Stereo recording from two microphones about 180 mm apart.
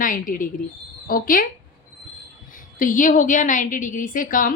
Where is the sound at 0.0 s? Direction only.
50° left (ahead or behind).